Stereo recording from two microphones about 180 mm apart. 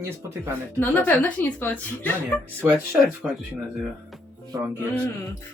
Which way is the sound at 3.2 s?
5° right (ahead or behind).